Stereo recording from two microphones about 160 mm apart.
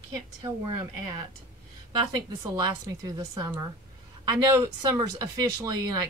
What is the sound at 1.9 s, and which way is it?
A woman's voice, 25° right (ahead or behind).